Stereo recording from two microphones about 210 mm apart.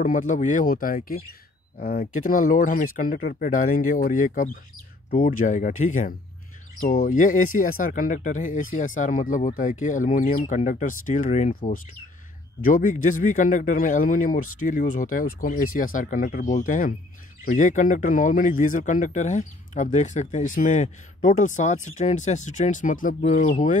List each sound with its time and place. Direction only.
0.0 s speech: 40° left (ahead or behind)